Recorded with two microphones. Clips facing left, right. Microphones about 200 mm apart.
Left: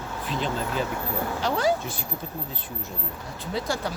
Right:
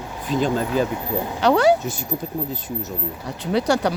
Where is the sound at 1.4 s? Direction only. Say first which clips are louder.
Right 9 dB; 70° right (ahead or behind).